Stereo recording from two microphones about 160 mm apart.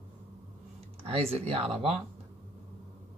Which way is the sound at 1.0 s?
40° right (ahead or behind).